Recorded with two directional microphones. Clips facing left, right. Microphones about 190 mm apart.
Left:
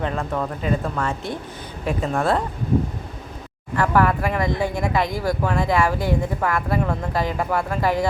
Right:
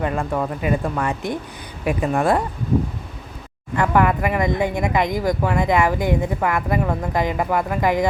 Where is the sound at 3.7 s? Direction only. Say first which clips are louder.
Right 1 dB; 15° right (ahead or behind).